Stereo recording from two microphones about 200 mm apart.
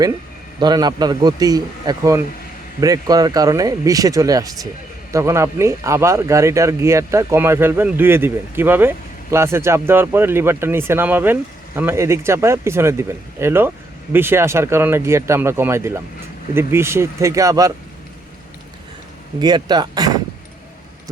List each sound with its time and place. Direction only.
0.6 s a man's voice: 20° right (ahead or behind)
19.4 s a man's voice: 20° right (ahead or behind)